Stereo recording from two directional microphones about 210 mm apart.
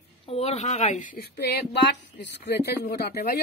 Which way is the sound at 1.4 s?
50° left (ahead or behind).